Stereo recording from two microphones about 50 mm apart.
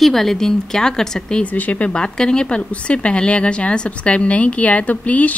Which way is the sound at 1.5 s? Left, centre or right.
Left.